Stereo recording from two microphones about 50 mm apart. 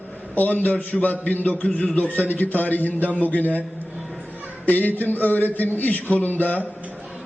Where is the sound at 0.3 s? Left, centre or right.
Left.